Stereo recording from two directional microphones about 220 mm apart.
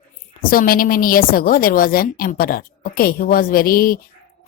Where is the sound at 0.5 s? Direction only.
40° left (ahead or behind).